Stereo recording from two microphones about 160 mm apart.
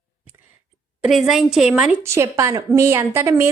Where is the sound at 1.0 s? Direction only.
Centre (ahead or behind).